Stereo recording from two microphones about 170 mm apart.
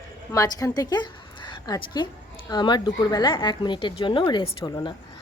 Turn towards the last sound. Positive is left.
turn(degrees=30)  # may be behind; listen again after turning